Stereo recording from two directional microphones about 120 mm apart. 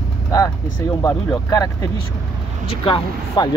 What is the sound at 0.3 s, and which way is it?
A man's voice, 30° left (ahead or behind).